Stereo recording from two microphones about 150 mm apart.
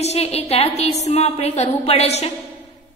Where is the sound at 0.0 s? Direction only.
45° left (ahead or behind).